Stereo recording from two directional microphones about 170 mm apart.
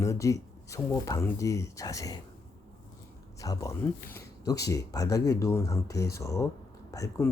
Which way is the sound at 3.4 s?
20° left (ahead or behind).